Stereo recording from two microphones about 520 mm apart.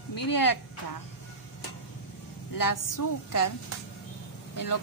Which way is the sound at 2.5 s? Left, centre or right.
Left.